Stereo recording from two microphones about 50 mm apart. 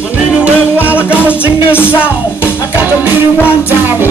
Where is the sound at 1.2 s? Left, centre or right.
Right.